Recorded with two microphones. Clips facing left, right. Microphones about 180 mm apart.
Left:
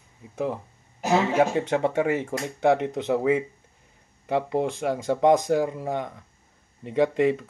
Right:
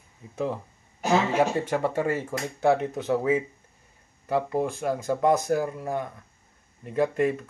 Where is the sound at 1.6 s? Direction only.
20° left (ahead or behind).